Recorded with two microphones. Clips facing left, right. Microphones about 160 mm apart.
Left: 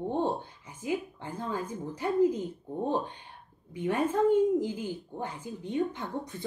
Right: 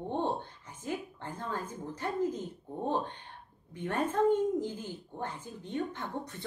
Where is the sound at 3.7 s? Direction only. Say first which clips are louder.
Left 4 dB; 10° left (ahead or behind).